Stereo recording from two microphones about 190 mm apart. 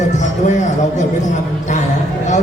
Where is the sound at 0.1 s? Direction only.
40° left (ahead or behind).